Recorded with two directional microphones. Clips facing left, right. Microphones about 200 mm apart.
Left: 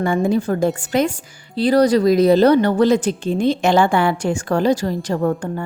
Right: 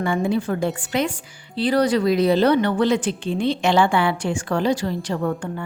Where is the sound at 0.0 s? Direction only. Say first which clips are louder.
Left 4 dB; 40° left (ahead or behind).